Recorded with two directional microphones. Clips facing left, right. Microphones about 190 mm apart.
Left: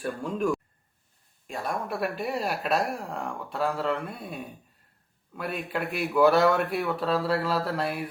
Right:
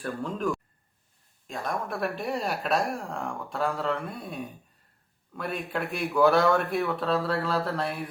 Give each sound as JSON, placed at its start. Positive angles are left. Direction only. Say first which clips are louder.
{"t": 0.0, "sound": "speech", "louder": "left 2 dB", "side_deg": 10}